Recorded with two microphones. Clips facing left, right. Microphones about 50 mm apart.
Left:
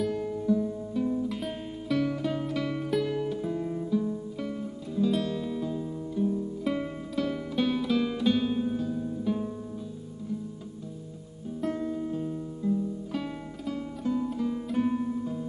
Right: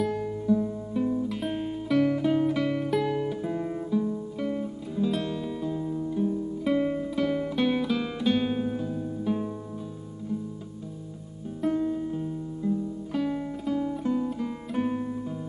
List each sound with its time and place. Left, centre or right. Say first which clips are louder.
0.0 s music: right 1 dB; centre
3.5 s guitar: right 1 dB; right
3.9 s music: right 2 dB; centre
5.2 s music: even; centre
6.7 s music: right 5 dB; centre
7.0 s guitar: right 4 dB; centre
7.5 s music: left 3 dB; centre
8.4 s guitar: even; right
8.8 s music: even; centre
11.6 s music: right 5 dB; centre
12.6 s guitar: left 1 dB; centre
13.7 s music: right 2 dB; centre
14.3 s guitar: left 1 dB; centre